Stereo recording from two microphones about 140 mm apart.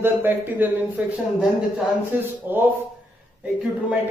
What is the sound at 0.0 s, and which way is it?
Speech, 15° right (ahead or behind).